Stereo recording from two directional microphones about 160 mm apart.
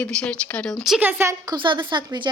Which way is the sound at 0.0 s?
5° left (ahead or behind).